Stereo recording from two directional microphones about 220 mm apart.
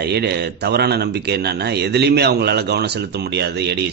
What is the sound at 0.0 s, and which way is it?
Speech, 50° right (ahead or behind).